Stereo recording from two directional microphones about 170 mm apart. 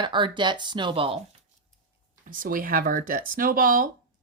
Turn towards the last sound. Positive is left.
turn(degrees=-55)  # may be behind; listen again after turning